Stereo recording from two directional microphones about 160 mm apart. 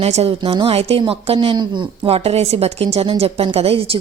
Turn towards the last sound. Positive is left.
turn(degrees=-40)  # may be behind; listen again after turning